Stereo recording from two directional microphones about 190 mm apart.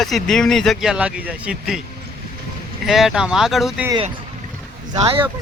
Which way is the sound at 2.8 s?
Centre (ahead or behind).